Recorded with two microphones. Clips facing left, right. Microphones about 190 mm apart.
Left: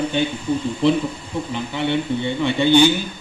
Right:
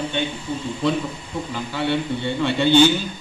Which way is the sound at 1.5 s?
20° left (ahead or behind).